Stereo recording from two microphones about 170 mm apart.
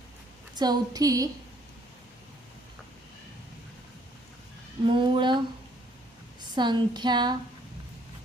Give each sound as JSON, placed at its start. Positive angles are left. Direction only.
{"t": 0.5, "sound": "speech", "side_deg": -25}
{"t": 4.9, "sound": "speech", "side_deg": -30}
{"t": 6.5, "sound": "speech", "side_deg": -25}